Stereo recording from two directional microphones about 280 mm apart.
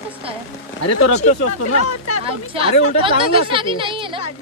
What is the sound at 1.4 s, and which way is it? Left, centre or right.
Speech, left.